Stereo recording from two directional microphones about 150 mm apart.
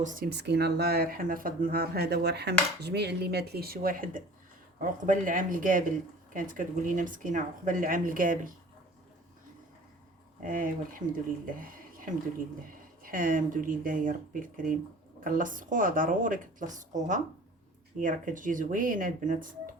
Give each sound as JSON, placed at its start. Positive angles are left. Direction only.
{"t": 0.0, "sound": "speech", "side_deg": -80}
{"t": 10.5, "sound": "speech", "side_deg": -65}
{"t": 13.0, "sound": "speech", "side_deg": -65}